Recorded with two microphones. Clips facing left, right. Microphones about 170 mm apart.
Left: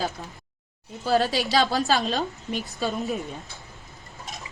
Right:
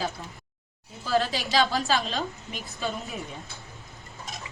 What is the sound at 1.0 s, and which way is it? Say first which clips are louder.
A woman's voice: left 3 dB; 35° left (ahead or behind).